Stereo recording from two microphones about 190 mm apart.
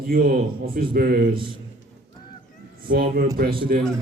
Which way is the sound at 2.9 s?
55° right (ahead or behind).